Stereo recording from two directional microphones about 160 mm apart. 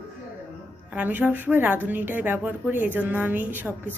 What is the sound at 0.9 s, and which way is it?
A woman's voice, 10° right (ahead or behind).